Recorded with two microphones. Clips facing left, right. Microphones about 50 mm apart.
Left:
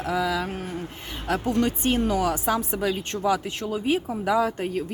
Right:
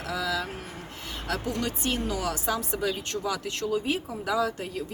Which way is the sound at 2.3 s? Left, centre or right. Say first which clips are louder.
Left 4 dB; left.